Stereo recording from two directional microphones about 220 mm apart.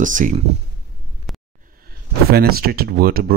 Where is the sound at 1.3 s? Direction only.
Centre (ahead or behind).